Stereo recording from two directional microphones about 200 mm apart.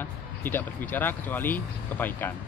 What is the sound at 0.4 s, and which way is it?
Speech, 10° left (ahead or behind).